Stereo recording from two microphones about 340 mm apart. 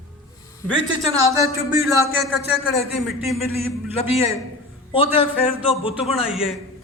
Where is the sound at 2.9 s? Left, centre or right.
Centre.